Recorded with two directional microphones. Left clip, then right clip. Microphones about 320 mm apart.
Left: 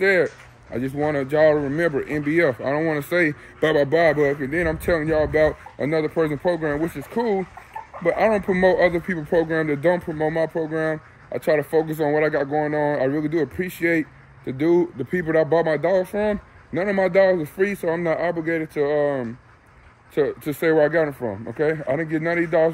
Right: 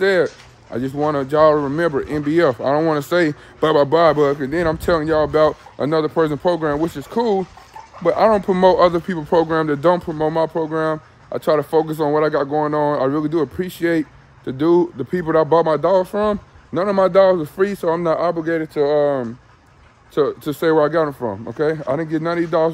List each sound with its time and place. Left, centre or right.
0.7 s speech: centre